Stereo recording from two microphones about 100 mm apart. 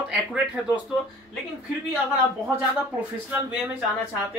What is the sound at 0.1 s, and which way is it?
Speech, 5° right (ahead or behind).